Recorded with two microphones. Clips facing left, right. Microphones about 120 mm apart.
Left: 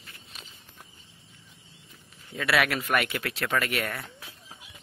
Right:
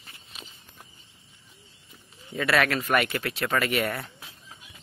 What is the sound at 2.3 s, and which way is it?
Speech, 5° left (ahead or behind).